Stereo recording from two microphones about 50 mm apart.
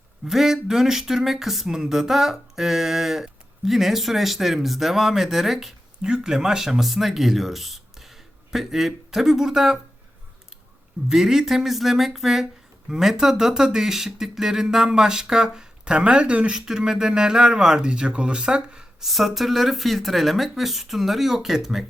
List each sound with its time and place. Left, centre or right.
0.3 s speech: centre
6.0 s speech: centre
11.1 s speech: centre
16.6 s speech: centre
19.0 s speech: centre